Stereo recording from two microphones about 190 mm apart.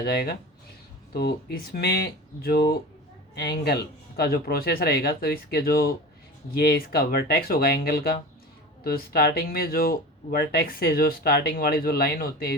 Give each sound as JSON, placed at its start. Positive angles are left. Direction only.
{"t": 0.0, "sound": "speech", "side_deg": 55}